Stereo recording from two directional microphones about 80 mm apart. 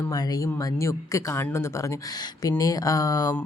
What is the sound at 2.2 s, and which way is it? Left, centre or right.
Speech, left.